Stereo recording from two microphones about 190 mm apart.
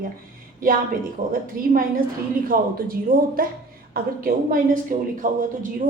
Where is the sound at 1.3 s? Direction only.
50° right (ahead or behind).